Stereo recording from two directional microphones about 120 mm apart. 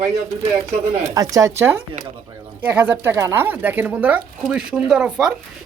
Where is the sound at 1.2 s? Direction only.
30° right (ahead or behind); by 5.3 s 5° right (ahead or behind).